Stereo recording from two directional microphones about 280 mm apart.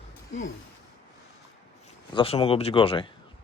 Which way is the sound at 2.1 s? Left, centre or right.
Centre.